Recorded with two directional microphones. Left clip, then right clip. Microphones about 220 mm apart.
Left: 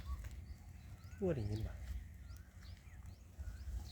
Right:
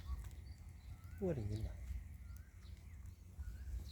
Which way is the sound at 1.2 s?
5° left (ahead or behind).